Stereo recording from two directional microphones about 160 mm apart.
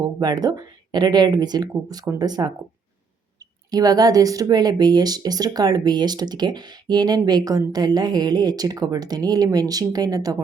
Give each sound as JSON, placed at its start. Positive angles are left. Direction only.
{"t": 0.0, "sound": "speech", "side_deg": -25}
{"t": 3.7, "sound": "speech", "side_deg": -25}